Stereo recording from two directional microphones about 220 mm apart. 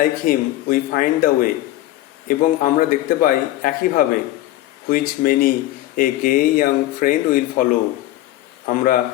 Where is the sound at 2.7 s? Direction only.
40° left (ahead or behind).